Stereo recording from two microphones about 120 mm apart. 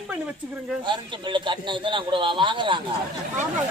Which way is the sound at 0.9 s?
40° right (ahead or behind).